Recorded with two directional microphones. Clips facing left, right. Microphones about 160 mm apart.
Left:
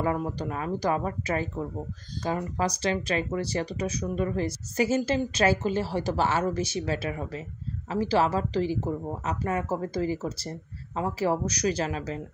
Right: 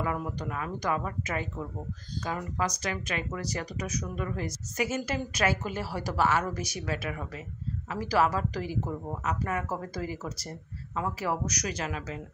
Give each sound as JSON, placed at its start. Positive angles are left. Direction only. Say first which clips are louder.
{"t": 0.0, "sound": "speech", "louder": "left 4 dB", "side_deg": 30}